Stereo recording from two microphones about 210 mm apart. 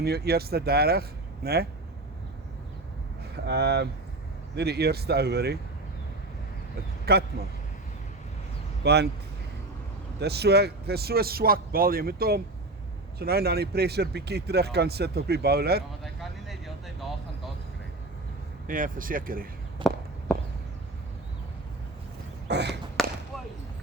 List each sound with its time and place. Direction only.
0.0 s speech: 50° right (ahead or behind)
3.4 s speech: 50° right (ahead or behind)
7.0 s a man's voice: 50° right (ahead or behind)
8.8 s speech: 50° right (ahead or behind)
10.2 s speech: 50° right (ahead or behind)
18.7 s speech: 40° right (ahead or behind)
19.8 s walk: 25° right (ahead or behind)
22.4 s a sound: 55° right (ahead or behind)
23.0 s a sound: centre (ahead or behind)